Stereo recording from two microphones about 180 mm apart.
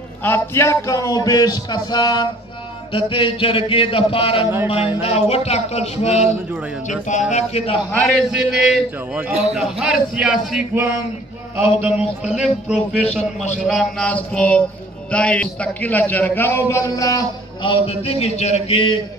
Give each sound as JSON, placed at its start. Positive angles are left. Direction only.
{"t": 0.2, "sound": "a man's voice", "side_deg": 15}
{"t": 5.0, "sound": "music", "side_deg": 35}
{"t": 7.9, "sound": "a man's voice", "side_deg": 0}
{"t": 12.4, "sound": "a man's voice", "side_deg": -5}
{"t": 13.0, "sound": "music", "side_deg": 40}
{"t": 13.7, "sound": "a man's voice", "side_deg": 0}